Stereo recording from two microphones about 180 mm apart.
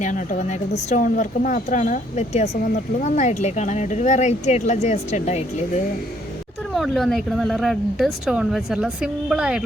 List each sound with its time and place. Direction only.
0.0 s a woman's voice: 45° left (ahead or behind)
6.7 s speech: centre (ahead or behind)